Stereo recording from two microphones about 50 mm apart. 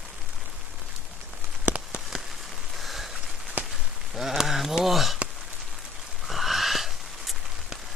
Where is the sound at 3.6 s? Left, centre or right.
Right.